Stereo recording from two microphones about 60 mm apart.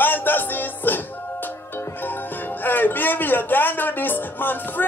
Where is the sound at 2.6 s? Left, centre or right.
Left.